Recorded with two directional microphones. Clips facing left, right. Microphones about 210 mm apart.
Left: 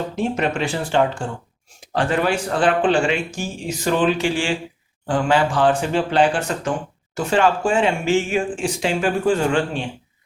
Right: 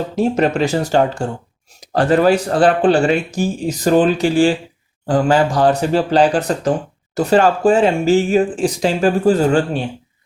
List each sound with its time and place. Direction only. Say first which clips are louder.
0.2 s speech: right 7 dB; 40° right (ahead or behind)